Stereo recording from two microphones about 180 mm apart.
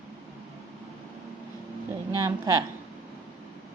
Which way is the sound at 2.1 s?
15° right (ahead or behind).